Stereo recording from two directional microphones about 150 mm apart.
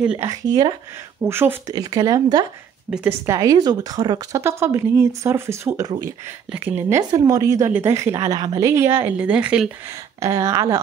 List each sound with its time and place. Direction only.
0.2 s a woman's voice: 25° right (ahead or behind)
1.2 s speech: 15° right (ahead or behind)
1.7 s a woman's voice: 25° right (ahead or behind)
2.9 s speech: 10° right (ahead or behind)
3.3 s a woman's voice: 20° right (ahead or behind)
6.5 s speech: 10° right (ahead or behind)
7.0 s a woman's voice: 20° right (ahead or behind); by 9.7 s 5° right (ahead or behind)
9.8 s a woman's voice: 20° right (ahead or behind)